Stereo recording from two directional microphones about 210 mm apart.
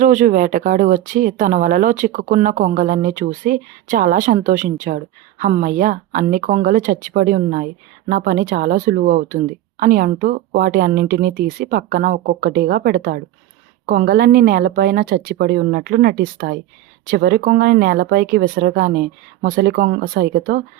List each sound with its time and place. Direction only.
0.0 s speech: 40° right (ahead or behind)